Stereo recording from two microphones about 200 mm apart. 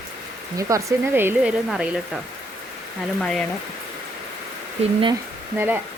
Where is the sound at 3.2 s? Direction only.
5° left (ahead or behind).